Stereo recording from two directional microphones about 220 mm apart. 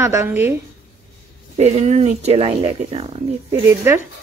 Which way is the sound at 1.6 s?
30° right (ahead or behind).